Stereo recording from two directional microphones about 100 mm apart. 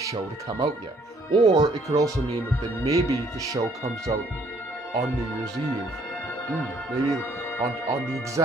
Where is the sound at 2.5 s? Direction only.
30° left (ahead or behind).